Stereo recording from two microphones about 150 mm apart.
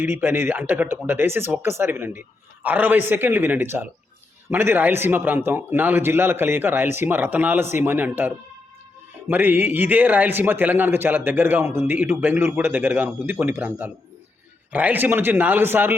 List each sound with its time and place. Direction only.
0.0 s speech: 15° right (ahead or behind)